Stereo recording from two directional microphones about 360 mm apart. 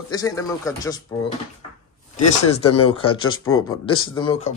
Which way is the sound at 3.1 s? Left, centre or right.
Left.